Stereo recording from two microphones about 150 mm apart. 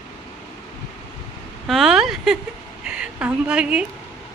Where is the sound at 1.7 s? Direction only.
Centre (ahead or behind).